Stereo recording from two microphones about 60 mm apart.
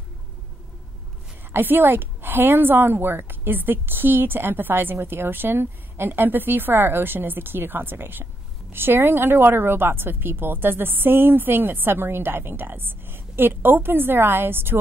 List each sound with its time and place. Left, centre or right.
1.5 s a woman's voice: right